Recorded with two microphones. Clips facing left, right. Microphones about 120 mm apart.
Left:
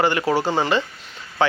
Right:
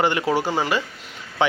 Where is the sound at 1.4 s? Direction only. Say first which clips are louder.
Left 1 dB; 20° right (ahead or behind).